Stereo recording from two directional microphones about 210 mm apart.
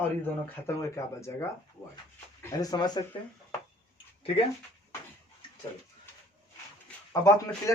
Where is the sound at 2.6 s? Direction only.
20° left (ahead or behind).